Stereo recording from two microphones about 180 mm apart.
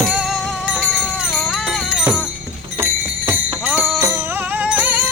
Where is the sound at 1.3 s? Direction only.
Centre (ahead or behind).